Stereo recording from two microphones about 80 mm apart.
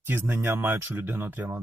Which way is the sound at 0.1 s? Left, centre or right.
Right.